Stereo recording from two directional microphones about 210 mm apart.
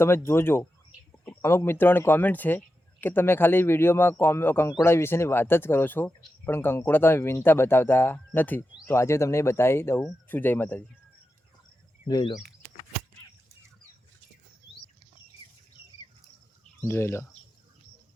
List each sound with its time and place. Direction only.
0.0 s speech: 10° left (ahead or behind)
12.0 s speech: 20° left (ahead or behind)
16.8 s speech: 10° left (ahead or behind)